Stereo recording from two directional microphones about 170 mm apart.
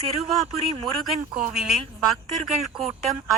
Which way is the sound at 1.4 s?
5° right (ahead or behind).